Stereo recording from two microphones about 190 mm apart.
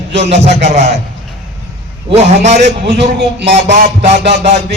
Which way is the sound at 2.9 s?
65° right (ahead or behind).